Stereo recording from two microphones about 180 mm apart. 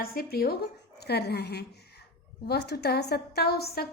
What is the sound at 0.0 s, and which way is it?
A woman's voice, 55° left (ahead or behind).